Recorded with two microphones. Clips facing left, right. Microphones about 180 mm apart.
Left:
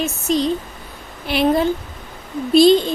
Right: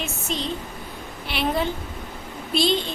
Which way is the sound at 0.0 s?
40° left (ahead or behind).